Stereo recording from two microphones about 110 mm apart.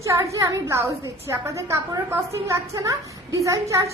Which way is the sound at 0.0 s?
30° right (ahead or behind).